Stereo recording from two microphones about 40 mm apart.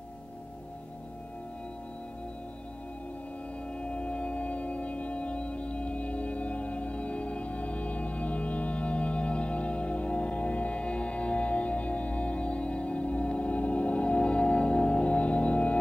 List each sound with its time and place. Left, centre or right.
3.8 s music: left